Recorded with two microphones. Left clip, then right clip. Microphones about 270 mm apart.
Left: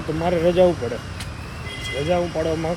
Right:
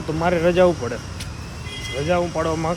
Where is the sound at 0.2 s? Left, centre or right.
Right.